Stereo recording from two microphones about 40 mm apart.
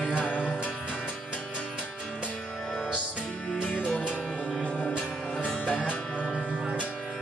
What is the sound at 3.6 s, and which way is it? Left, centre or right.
Music, left.